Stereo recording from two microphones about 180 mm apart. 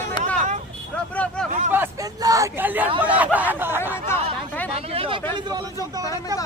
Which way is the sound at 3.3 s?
10° right (ahead or behind).